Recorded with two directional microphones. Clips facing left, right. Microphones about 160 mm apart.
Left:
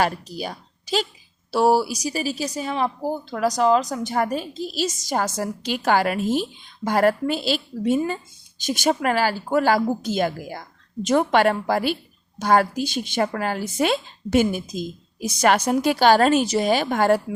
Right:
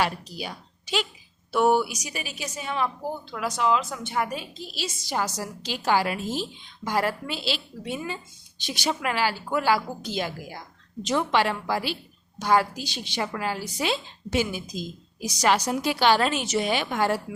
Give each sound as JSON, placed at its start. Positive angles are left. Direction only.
{"t": 0.0, "sound": "a woman's voice", "side_deg": 45}